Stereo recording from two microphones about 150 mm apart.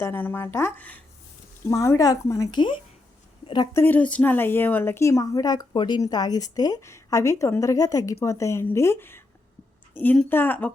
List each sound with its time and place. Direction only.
0.0 s a woman's voice: 15° left (ahead or behind); by 3.7 s 30° left (ahead or behind)
3.8 s a woman's voice: 10° left (ahead or behind)